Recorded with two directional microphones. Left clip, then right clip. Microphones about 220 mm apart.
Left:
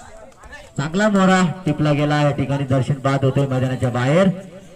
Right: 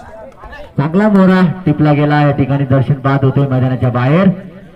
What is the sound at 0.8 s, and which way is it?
A man's voice, centre (ahead or behind).